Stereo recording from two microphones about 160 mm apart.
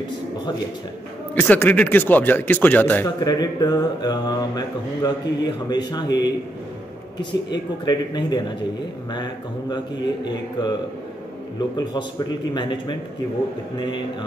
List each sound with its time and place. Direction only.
1.3 s speech: 10° left (ahead or behind)
3.2 s mantra: 25° left (ahead or behind)
7.4 s mantra: 25° left (ahead or behind)